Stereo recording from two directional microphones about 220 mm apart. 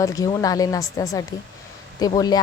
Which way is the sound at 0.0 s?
15° left (ahead or behind).